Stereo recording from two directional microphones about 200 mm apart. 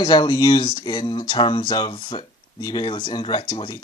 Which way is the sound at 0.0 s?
20° left (ahead or behind).